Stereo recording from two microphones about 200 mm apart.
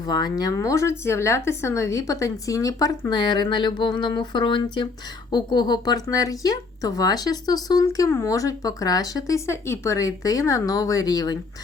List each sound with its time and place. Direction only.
0.0 s speech: 20° left (ahead or behind)